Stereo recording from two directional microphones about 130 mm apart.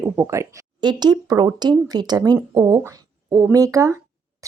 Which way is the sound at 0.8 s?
35° right (ahead or behind).